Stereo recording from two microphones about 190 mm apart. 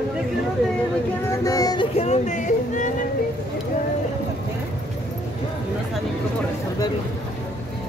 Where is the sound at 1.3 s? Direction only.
20° left (ahead or behind).